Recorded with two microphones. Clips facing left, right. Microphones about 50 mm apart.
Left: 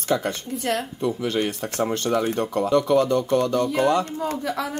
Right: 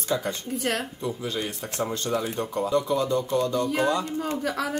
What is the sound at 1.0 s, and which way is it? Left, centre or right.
Speech, left.